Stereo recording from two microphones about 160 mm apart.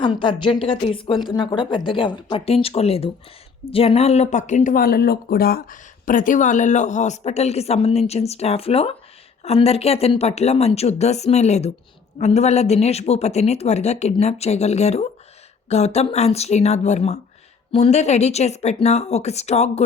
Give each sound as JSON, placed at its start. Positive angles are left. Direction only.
{"t": 0.0, "sound": "speech", "side_deg": 30}